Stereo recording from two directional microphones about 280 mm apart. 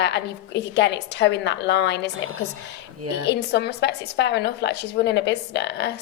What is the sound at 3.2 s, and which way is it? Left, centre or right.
Speech, left.